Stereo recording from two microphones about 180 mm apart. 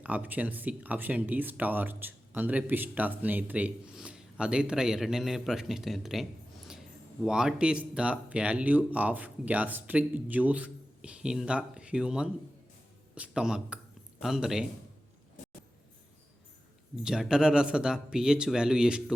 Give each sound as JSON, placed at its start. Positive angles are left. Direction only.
{"t": 0.0, "sound": "a man's voice", "side_deg": -10}
{"t": 16.9, "sound": "speech", "side_deg": -5}